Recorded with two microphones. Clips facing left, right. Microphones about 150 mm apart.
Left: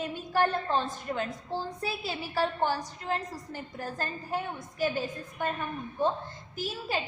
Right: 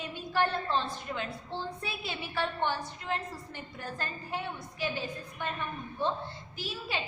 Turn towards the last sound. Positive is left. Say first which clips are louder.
# left 4 dB
turn(degrees=45)  # may be behind; listen again after turning